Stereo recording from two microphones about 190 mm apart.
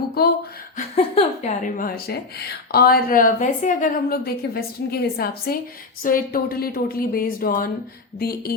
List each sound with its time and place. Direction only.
0.2 s a sound: 55° left (ahead or behind)
0.9 s speech: 30° left (ahead or behind)
1.6 s a woman's voice: 45° left (ahead or behind)